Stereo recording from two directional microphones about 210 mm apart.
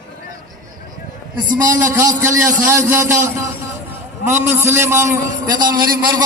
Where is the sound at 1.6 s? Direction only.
15° right (ahead or behind).